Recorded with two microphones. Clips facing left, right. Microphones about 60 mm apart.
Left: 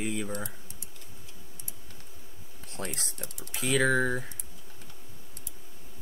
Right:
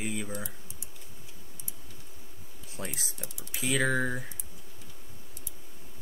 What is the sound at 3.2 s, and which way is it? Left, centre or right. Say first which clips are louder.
Speech: left 2 dB; left.